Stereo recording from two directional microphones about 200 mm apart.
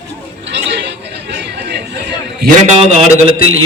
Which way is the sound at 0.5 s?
60° right (ahead or behind).